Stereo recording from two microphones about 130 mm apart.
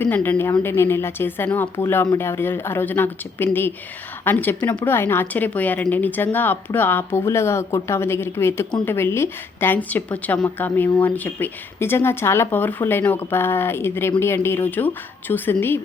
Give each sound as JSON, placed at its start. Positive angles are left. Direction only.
{"t": 0.0, "sound": "a woman's voice", "side_deg": 15}